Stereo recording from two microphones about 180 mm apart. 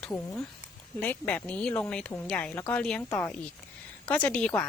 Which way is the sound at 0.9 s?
10° left (ahead or behind).